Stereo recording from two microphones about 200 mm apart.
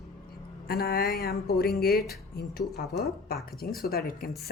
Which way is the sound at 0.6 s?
50° left (ahead or behind).